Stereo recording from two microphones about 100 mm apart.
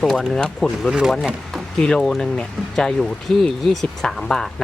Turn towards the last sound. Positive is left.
turn(degrees=5)  # may be behind; listen again after turning